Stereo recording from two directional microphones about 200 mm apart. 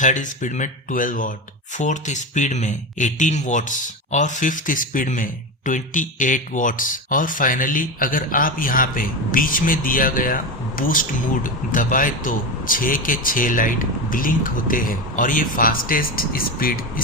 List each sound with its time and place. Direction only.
0.0 s speech: 40° left (ahead or behind)